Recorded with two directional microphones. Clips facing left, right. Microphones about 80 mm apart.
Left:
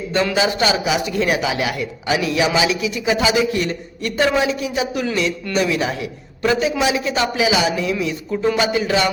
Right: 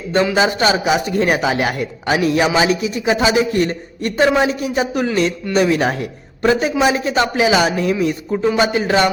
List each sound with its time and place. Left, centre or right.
0.3 s speech: right